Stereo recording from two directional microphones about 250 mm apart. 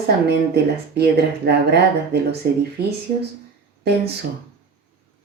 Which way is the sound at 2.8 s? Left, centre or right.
Right.